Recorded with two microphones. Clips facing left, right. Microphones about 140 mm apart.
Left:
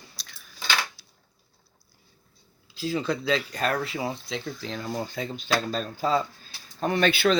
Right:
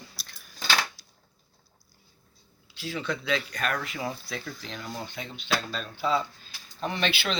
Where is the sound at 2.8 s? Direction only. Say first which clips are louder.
Left 5 dB; 35° left (ahead or behind).